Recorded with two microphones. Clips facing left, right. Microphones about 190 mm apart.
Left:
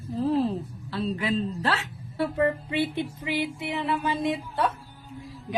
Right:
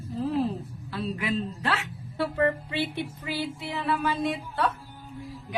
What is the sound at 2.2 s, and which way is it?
Music, 20° left (ahead or behind).